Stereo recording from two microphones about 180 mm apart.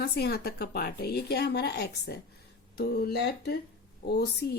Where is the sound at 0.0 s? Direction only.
60° left (ahead or behind).